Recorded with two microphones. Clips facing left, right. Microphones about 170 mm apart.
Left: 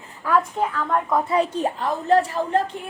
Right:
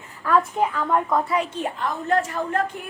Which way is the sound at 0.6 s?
10° right (ahead or behind).